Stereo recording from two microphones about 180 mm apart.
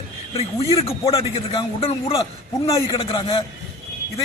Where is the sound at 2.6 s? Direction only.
20° left (ahead or behind).